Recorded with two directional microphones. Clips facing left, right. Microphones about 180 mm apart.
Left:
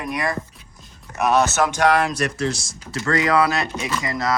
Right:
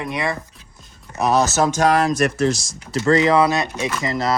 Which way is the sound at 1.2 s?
35° right (ahead or behind).